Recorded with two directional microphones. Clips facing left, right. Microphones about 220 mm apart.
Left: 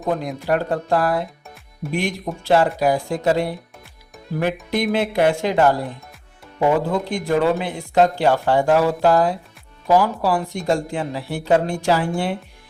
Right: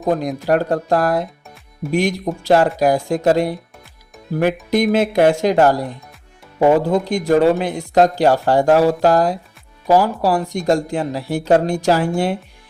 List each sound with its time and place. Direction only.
0.1 s speech: 40° right (ahead or behind)
4.7 s speech: 40° right (ahead or behind)